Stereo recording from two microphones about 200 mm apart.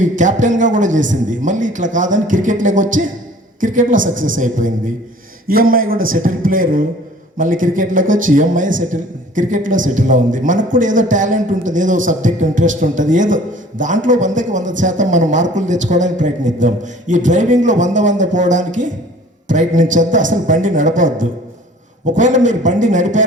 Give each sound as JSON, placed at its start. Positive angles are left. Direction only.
{"t": 0.0, "sound": "a man's voice", "side_deg": -40}